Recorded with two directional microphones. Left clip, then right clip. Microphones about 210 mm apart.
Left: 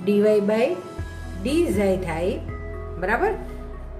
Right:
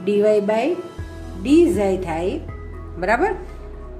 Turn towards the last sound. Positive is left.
turn(degrees=-30)  # may be behind; listen again after turning